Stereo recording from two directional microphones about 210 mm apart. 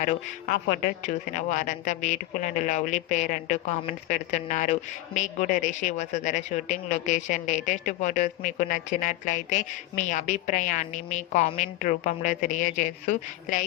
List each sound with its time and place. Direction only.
0.0 s a woman's voice: 35° left (ahead or behind)